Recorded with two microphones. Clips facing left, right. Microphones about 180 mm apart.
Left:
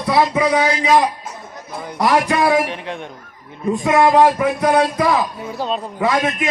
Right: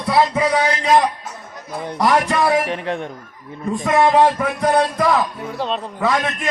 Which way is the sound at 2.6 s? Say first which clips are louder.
Right 3 dB; 35° right (ahead or behind).